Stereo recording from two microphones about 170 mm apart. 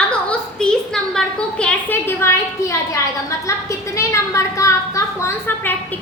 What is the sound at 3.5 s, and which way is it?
A woman's voice, 20° left (ahead or behind).